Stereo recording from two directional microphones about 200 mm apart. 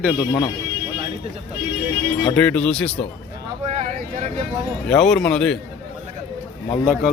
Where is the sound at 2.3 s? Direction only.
5° left (ahead or behind).